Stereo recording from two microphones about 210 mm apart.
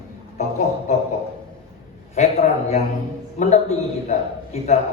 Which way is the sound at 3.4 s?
35° left (ahead or behind).